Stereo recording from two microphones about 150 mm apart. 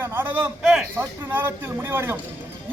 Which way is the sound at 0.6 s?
5° right (ahead or behind).